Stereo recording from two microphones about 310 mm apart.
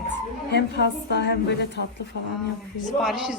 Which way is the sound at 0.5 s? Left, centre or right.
Left.